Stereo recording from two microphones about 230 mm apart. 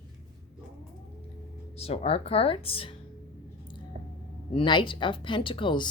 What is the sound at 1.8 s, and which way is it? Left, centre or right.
Speech, left.